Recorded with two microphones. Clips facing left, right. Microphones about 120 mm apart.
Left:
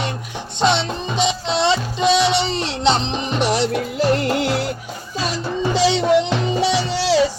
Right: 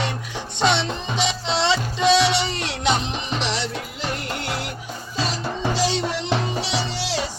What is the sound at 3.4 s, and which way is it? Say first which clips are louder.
Music: left 10 dB; 55° left (ahead or behind).